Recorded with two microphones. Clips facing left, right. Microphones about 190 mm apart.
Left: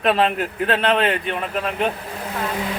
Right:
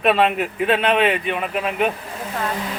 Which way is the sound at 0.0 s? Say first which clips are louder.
Right 1 dB; 5° right (ahead or behind).